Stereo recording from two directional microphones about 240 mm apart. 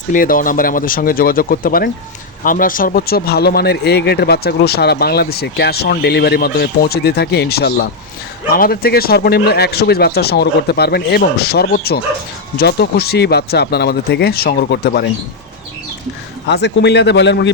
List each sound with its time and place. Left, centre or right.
0.1 s speech: left
16.5 s a man's voice: left